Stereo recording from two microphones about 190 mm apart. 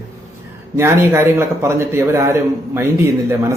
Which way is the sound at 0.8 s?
15° right (ahead or behind).